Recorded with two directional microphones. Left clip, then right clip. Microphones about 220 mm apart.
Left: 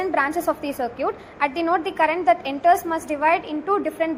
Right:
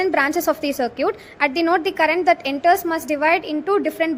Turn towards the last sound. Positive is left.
turn(degrees=-35)  # may be behind; listen again after turning